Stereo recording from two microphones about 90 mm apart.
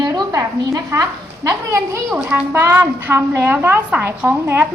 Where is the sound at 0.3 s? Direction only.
35° right (ahead or behind).